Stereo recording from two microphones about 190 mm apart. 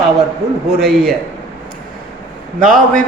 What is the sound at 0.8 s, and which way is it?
Speech, centre (ahead or behind).